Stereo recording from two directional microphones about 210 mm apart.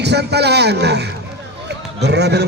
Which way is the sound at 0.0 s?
50° right (ahead or behind).